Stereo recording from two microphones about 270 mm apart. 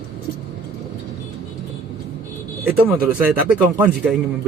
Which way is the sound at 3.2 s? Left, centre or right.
Centre.